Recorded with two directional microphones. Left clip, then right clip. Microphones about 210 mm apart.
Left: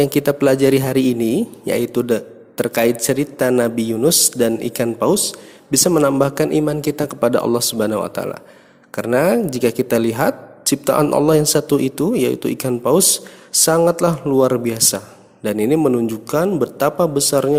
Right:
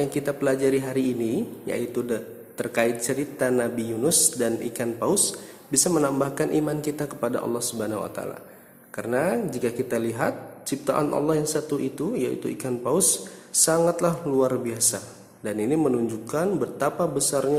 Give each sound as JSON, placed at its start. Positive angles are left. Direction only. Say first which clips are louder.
{"t": 0.0, "sound": "a man's voice", "louder": "left 10 dB", "side_deg": 40}